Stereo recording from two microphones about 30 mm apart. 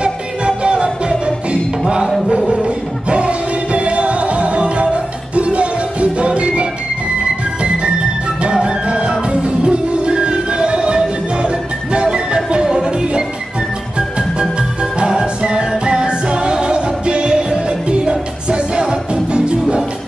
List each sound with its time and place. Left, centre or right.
0.0 s music: right
8.5 s music: right
14.8 s music: right